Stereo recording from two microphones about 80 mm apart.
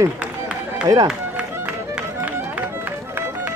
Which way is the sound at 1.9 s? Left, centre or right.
Right.